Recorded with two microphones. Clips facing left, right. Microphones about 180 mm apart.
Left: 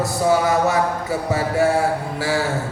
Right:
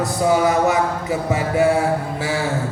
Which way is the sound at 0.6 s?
20° right (ahead or behind).